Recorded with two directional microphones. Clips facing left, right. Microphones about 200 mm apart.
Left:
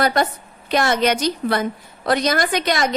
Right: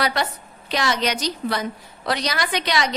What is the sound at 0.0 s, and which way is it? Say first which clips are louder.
A woman's voice: left 5 dB; 50° left (ahead or behind).